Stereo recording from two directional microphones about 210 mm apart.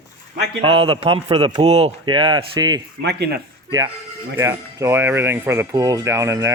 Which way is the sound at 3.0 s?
50° right (ahead or behind).